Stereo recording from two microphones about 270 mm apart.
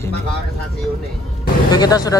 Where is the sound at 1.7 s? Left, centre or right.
Centre.